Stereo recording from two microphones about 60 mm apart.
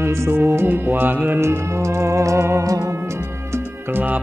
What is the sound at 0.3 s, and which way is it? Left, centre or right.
Music, right.